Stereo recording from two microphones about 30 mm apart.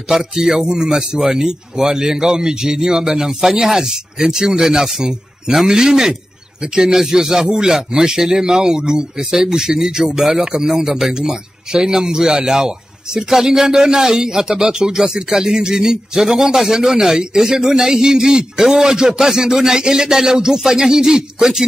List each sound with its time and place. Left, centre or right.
0.1 s a man's voice: centre
10.9 s speech: centre
11.1 s a man's voice: right